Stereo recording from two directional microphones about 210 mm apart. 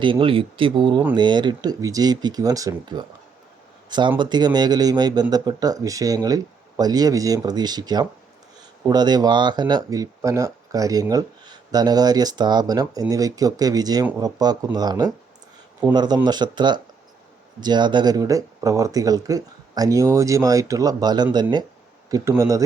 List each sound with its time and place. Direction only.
0.0 s speech: 25° right (ahead or behind)